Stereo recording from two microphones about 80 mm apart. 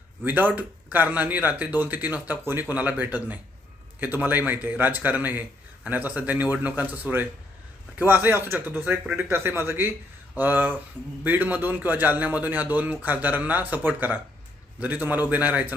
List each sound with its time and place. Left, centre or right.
0.3 s a man's voice: right